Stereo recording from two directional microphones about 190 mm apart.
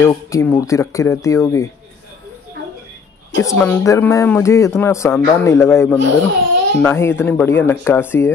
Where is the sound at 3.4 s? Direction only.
15° left (ahead or behind).